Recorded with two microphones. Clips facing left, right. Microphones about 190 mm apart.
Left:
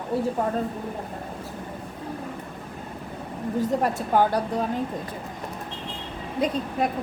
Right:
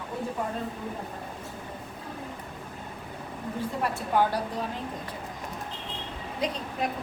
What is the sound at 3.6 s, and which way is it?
Speech, 45° left (ahead or behind).